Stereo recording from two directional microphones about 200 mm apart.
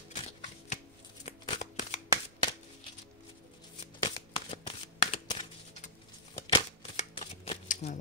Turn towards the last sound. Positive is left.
turn(degrees=35)  # may be behind; listen again after turning